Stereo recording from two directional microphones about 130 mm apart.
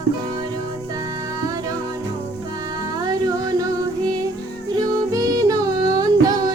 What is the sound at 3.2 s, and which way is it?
Music, 30° right (ahead or behind).